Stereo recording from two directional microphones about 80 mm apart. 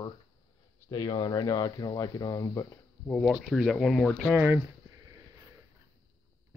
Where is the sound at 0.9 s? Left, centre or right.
Left.